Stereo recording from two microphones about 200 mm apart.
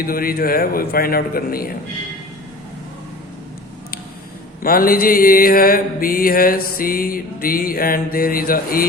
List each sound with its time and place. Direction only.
0.0 s mantra: 45° left (ahead or behind)
4.6 s mantra: 45° left (ahead or behind)